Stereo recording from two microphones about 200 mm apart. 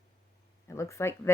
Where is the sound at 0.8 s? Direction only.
15° left (ahead or behind).